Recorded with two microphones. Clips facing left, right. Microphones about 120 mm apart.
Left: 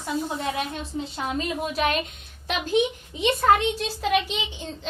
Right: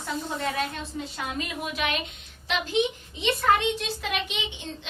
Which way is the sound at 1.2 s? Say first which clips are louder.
Left 5 dB; 35° left (ahead or behind).